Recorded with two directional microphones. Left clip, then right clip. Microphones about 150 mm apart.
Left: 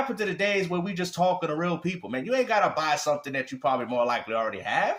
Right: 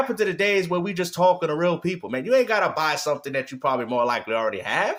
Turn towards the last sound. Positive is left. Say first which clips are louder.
# right 3 dB
turn(degrees=-55)  # may be behind; listen again after turning